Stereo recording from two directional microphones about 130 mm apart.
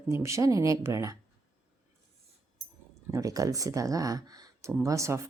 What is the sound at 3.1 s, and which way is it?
Speech, 25° right (ahead or behind).